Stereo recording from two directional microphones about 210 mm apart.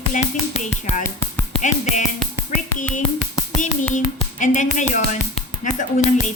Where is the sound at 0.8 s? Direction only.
35° left (ahead or behind).